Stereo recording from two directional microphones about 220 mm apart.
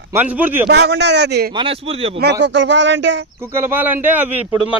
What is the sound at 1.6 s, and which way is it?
Speech, 25° right (ahead or behind).